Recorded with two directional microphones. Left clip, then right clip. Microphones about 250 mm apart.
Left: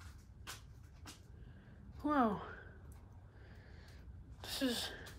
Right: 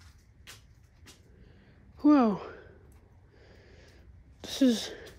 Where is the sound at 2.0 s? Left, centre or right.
Right.